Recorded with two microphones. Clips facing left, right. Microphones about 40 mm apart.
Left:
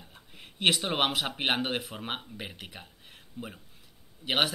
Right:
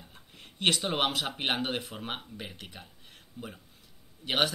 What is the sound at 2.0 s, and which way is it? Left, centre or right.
Speech, centre.